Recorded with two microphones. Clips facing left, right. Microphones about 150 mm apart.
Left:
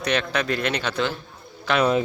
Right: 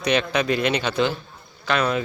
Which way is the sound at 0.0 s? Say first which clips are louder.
Right 3 dB; 10° right (ahead or behind).